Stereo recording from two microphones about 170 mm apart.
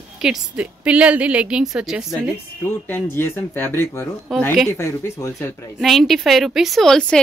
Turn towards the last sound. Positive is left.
turn(degrees=5)  # may be behind; listen again after turning